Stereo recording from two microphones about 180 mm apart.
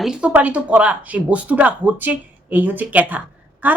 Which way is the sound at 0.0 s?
5° right (ahead or behind).